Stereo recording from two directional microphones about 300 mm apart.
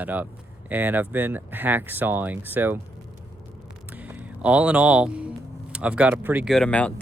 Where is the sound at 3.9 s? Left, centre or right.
Centre.